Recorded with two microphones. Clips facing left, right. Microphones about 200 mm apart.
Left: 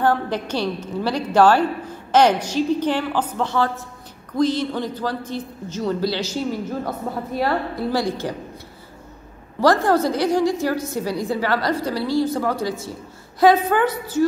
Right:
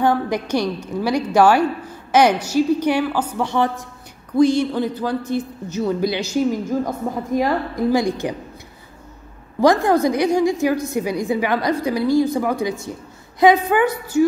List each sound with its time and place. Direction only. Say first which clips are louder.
0.0 s a woman's voice: right 2 dB; 10° right (ahead or behind)
9.6 s a woman's voice: right 2 dB; 15° right (ahead or behind)